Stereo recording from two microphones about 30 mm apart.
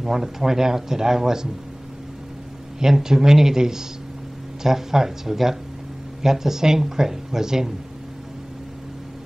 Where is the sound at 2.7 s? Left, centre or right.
Centre.